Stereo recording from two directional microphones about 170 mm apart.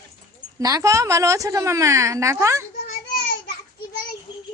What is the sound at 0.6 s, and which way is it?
A woman's voice, 20° right (ahead or behind).